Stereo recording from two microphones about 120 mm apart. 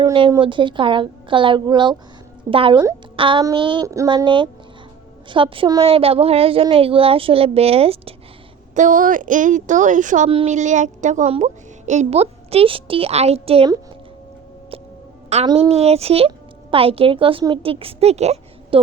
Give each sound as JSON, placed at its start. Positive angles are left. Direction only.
{"t": 0.0, "sound": "speech", "side_deg": -40}
{"t": 3.2, "sound": "a sound", "side_deg": -45}
{"t": 3.5, "sound": "speech", "side_deg": -45}
{"t": 3.8, "sound": "speech", "side_deg": -25}
{"t": 4.1, "sound": "speech", "side_deg": -40}
{"t": 8.7, "sound": "speech", "side_deg": -90}
{"t": 10.2, "sound": "speech", "side_deg": -50}
{"t": 10.5, "sound": "speech", "side_deg": -85}
{"t": 11.3, "sound": "speech", "side_deg": -70}
{"t": 15.3, "sound": "a woman's voice", "side_deg": -65}